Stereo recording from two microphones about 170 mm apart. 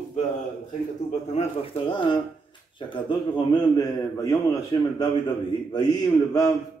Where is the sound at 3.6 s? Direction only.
20° left (ahead or behind).